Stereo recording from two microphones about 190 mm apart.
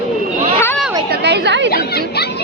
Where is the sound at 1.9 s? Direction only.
60° left (ahead or behind).